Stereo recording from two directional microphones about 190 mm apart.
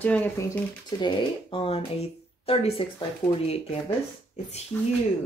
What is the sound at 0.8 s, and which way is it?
Speech, 25° left (ahead or behind).